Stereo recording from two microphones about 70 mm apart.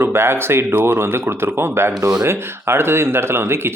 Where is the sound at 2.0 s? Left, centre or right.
Right.